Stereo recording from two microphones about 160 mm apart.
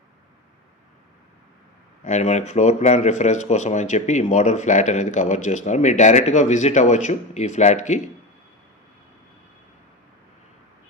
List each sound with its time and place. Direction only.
2.0 s speech: 45° left (ahead or behind)